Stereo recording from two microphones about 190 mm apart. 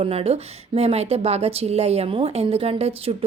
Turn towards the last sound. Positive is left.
turn(degrees=-30)  # may be behind; listen again after turning